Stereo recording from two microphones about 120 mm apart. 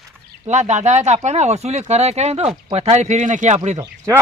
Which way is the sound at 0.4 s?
70° right (ahead or behind).